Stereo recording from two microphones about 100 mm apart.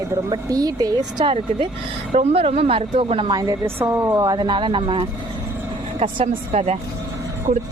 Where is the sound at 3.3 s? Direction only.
35° right (ahead or behind).